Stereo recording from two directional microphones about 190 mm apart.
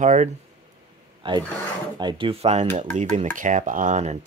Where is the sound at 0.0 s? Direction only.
40° right (ahead or behind).